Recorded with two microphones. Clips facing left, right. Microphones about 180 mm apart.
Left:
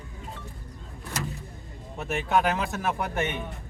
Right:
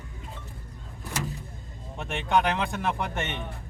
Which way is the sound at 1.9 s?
5° left (ahead or behind).